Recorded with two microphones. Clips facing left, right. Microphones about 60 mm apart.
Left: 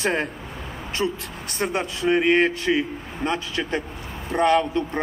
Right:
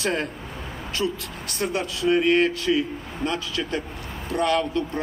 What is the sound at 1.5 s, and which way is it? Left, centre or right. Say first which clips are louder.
A man's voice: left 1 dB; left.